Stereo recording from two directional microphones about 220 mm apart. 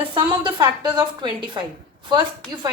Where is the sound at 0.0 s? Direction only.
25° right (ahead or behind).